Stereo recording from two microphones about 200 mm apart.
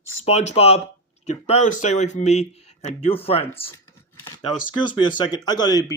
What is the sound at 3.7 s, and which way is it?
Scissors, 15° left (ahead or behind).